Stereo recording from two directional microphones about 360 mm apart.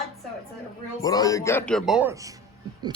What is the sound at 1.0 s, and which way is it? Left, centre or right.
Speech, centre.